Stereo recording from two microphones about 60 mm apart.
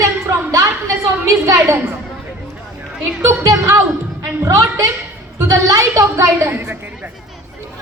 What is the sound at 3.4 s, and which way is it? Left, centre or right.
A woman's voice, right.